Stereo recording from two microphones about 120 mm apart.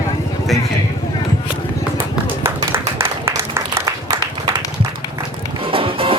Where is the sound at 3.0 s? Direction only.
20° right (ahead or behind).